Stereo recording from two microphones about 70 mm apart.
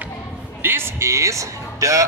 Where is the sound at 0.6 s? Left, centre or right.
Right.